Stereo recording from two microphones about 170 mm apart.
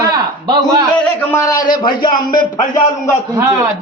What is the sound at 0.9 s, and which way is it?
A man's voice, 10° left (ahead or behind).